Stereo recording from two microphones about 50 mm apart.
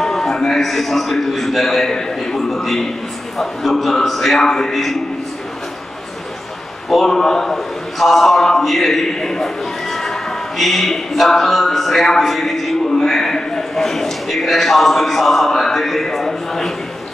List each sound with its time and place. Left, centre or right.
0.0 s a man's voice: centre
6.9 s a man's voice: centre